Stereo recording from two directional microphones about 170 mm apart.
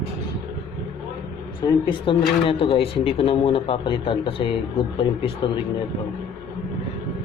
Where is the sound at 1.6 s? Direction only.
30° left (ahead or behind).